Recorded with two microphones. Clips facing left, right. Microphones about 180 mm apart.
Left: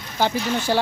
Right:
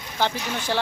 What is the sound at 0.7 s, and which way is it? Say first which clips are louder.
Speech: left 4 dB; 10° left (ahead or behind).